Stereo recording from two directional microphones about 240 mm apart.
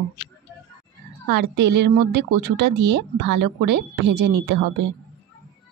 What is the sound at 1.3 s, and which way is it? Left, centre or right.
Speech, right.